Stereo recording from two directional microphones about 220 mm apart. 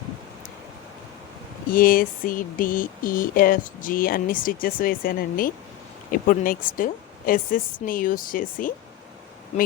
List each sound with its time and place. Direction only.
1.7 s speech: 40° left (ahead or behind)